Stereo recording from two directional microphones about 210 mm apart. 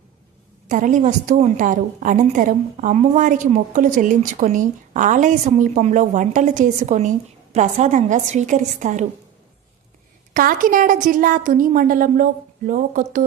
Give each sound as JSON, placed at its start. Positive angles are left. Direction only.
{"t": 0.7, "sound": "a woman's voice", "side_deg": -40}
{"t": 10.3, "sound": "a woman's voice", "side_deg": -40}